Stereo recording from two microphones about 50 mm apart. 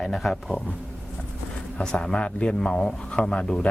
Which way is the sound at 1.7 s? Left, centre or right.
Centre.